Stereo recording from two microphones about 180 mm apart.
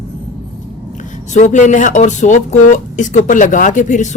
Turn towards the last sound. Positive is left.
turn(degrees=45)  # may be behind; listen again after turning